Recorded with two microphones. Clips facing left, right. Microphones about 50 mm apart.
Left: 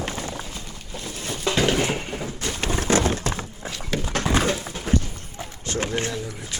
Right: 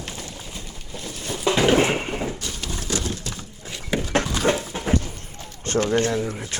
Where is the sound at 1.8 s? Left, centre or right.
Right.